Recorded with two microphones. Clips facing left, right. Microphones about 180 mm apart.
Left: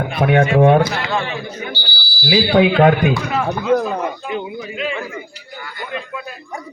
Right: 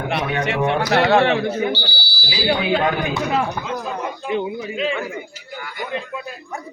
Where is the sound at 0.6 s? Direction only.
50° left (ahead or behind).